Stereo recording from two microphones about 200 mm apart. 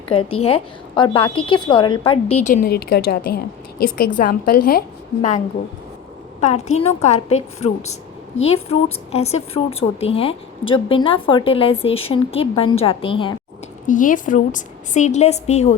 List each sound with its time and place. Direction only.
0.1 s a woman's voice: 25° left (ahead or behind)
2.6 s a woman's voice: 50° left (ahead or behind)
6.4 s a woman's voice: 35° left (ahead or behind)
13.8 s a woman's voice: 40° left (ahead or behind)